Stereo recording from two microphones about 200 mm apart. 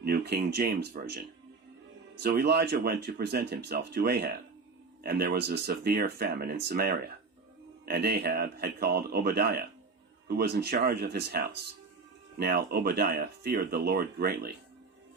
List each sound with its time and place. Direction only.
0.0 s speech: 50° right (ahead or behind)